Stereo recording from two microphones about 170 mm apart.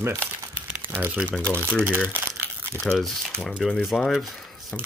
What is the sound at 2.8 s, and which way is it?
Speech, centre (ahead or behind).